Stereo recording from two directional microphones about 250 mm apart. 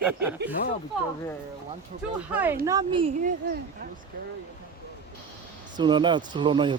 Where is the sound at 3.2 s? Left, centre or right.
Right.